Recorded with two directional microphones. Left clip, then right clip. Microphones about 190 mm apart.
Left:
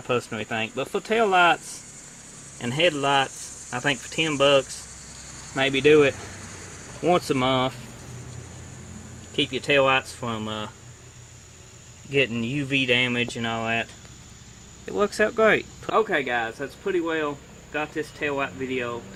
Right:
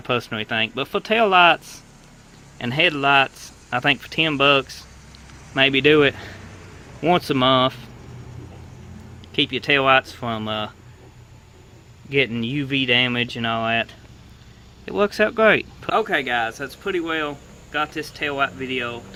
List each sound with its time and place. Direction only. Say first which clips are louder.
0.1 s speech: right 3 dB; 20° right (ahead or behind)
9.3 s speech: right 3 dB; 15° right (ahead or behind)
12.1 s speech: right 3 dB; 20° right (ahead or behind)
14.8 s speech: right 3 dB; 20° right (ahead or behind)